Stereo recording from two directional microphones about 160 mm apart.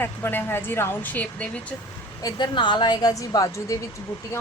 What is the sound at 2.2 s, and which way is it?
A woman's voice, 30° left (ahead or behind).